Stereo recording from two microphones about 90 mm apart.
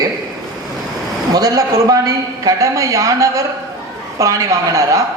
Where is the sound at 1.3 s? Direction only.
45° right (ahead or behind).